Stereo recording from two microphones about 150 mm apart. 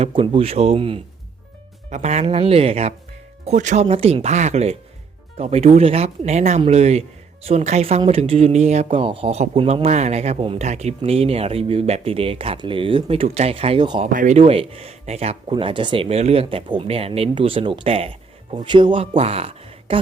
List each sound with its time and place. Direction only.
0.0 s speech: 40° right (ahead or behind)
1.9 s speech: 50° right (ahead or behind)
3.4 s speech: 55° right (ahead or behind)
3.8 s speech: 40° right (ahead or behind)
14.1 s speech: 65° right (ahead or behind)
14.3 s speech: 40° right (ahead or behind)